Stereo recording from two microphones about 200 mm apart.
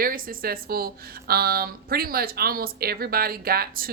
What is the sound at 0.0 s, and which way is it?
A woman's voice, 45° right (ahead or behind).